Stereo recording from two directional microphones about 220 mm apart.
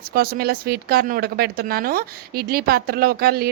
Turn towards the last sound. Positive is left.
turn(degrees=-45)  # may be behind; listen again after turning